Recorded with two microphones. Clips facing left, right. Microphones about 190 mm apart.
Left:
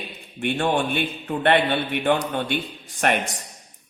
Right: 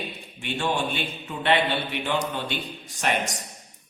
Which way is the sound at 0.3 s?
55° left (ahead or behind).